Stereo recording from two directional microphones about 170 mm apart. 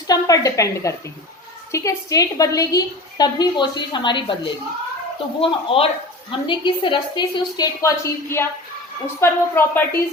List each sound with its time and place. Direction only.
0.1 s a woman's voice: 20° left (ahead or behind)